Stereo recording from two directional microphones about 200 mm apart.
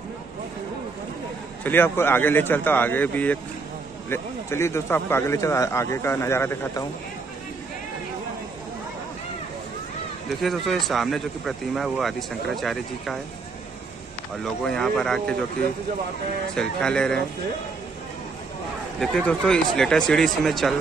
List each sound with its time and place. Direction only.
1.6 s speech: 10° left (ahead or behind)
10.4 s speech: centre (ahead or behind)
14.4 s speech: centre (ahead or behind)
16.5 s speech: 5° left (ahead or behind)
18.9 s speech: 5° left (ahead or behind)